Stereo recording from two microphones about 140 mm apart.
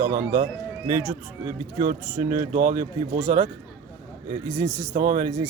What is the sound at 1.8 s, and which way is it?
Speech, 65° right (ahead or behind).